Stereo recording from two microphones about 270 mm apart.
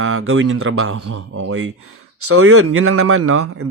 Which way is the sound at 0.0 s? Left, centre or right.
Right.